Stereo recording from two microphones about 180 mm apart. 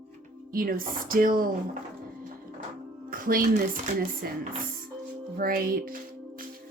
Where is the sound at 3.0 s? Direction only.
50° right (ahead or behind).